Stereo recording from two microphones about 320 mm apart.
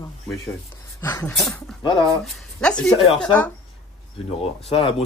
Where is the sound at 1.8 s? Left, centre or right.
Centre.